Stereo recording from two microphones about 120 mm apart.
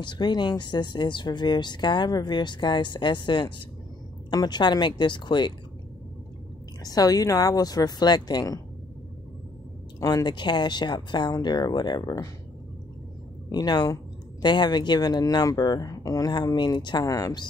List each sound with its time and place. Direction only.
0.0 s speech: 40° left (ahead or behind)
6.8 s speech: 30° left (ahead or behind)
9.9 s speech: 30° left (ahead or behind)
13.5 s speech: 35° left (ahead or behind)